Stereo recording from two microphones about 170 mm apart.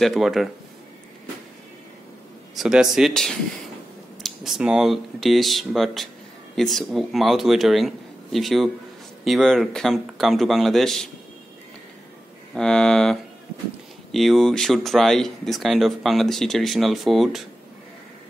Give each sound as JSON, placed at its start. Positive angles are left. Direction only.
{"t": 0.0, "sound": "speech", "side_deg": 0}
{"t": 2.5, "sound": "speech", "side_deg": -5}
{"t": 12.5, "sound": "speech", "side_deg": 5}